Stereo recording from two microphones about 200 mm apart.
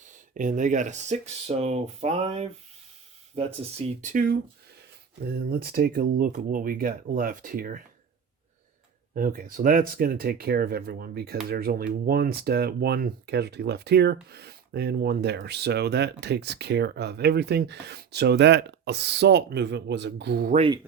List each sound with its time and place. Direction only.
0.0 s speech: 40° right (ahead or behind)
9.1 s speech: 45° right (ahead or behind)